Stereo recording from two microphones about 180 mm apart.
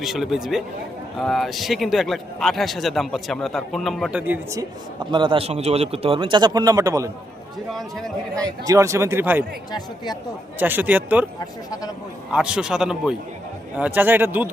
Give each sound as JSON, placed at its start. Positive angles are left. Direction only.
{"t": 0.0, "sound": "speech", "side_deg": 0}
{"t": 4.9, "sound": "speech", "side_deg": -25}
{"t": 7.7, "sound": "speech", "side_deg": 0}
{"t": 8.6, "sound": "speech", "side_deg": -15}
{"t": 10.6, "sound": "speech", "side_deg": -10}
{"t": 12.3, "sound": "speech", "side_deg": -5}